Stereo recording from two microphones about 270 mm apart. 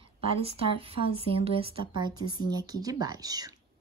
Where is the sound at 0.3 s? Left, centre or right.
Right.